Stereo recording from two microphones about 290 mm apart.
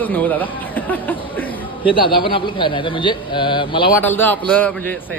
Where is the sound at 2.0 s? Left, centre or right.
Centre.